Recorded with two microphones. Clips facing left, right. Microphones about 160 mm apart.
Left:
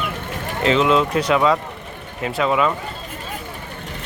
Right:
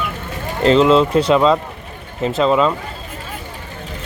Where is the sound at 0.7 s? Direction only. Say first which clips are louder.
Right 5 dB; 30° right (ahead or behind).